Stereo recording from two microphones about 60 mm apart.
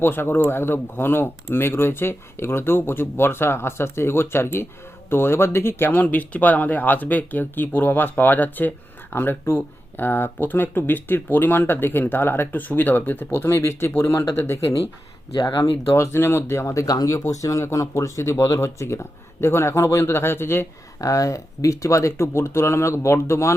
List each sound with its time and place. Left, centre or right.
0.0 s speech: left
16.0 s speech: left
21.0 s speech: left